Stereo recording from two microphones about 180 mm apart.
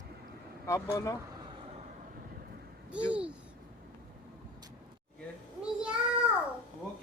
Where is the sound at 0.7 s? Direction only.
20° left (ahead or behind).